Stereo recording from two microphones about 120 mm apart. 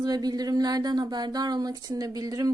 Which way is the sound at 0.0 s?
35° right (ahead or behind).